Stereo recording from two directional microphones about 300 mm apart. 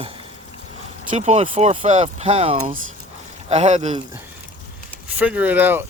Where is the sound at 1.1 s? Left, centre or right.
Right.